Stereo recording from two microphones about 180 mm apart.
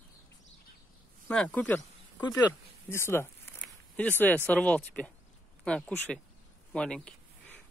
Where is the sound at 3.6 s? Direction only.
5° left (ahead or behind).